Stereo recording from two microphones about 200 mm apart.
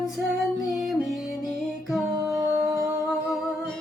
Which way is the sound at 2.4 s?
20° right (ahead or behind).